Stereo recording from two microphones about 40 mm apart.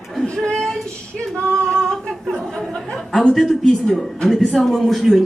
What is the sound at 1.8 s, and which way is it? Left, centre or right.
Humming, centre.